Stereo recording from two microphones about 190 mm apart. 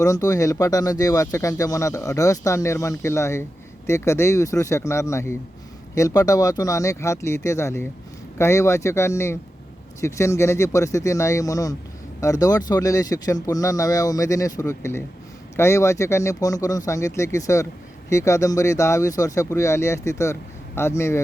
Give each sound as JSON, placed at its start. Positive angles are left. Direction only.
{"t": 0.0, "sound": "speech", "side_deg": 15}